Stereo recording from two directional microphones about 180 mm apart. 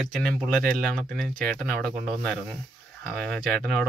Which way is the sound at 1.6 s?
5° left (ahead or behind).